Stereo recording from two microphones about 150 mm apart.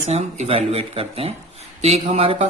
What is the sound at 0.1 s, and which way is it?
Speech, 45° right (ahead or behind).